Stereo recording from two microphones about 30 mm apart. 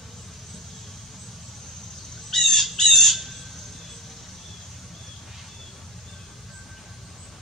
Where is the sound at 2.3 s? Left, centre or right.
Centre.